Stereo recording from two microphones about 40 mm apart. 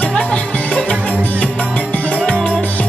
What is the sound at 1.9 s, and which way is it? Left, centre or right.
Music, left.